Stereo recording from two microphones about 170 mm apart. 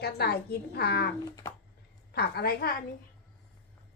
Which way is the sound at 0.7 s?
75° left (ahead or behind).